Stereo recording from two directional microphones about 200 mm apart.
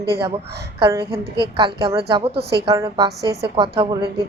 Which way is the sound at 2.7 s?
15° right (ahead or behind).